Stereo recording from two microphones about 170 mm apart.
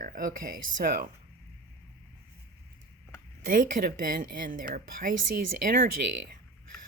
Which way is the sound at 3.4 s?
55° right (ahead or behind).